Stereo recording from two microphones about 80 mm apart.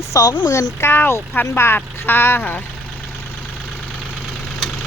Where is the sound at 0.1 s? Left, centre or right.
Left.